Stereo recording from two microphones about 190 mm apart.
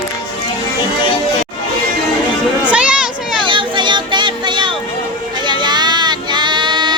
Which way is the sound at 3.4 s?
25° right (ahead or behind).